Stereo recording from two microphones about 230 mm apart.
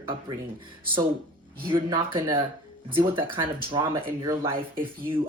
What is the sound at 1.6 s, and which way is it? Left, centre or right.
Speech, right.